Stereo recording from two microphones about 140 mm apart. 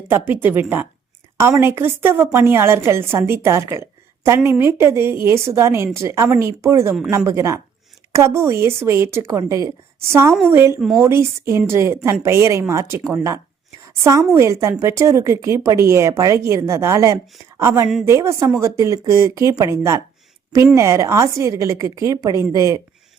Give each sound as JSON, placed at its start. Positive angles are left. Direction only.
{"t": 0.1, "sound": "a woman's voice", "side_deg": -15}
{"t": 10.8, "sound": "speech", "side_deg": -5}
{"t": 11.0, "sound": "a woman's voice", "side_deg": -20}